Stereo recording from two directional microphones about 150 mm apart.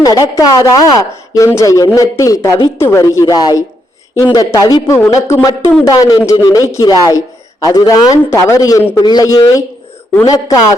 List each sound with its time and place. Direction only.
0.0 s speech: 25° left (ahead or behind)
4.9 s speech: 15° left (ahead or behind)